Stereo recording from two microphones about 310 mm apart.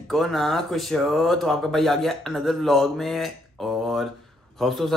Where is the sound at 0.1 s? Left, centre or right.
Centre.